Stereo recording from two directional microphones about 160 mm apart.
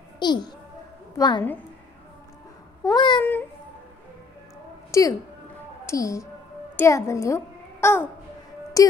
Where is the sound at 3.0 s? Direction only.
30° left (ahead or behind).